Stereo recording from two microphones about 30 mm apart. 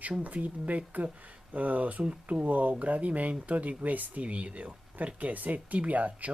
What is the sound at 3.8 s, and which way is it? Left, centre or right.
Speech, right.